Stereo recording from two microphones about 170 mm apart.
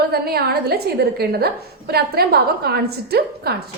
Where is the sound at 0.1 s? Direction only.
65° right (ahead or behind).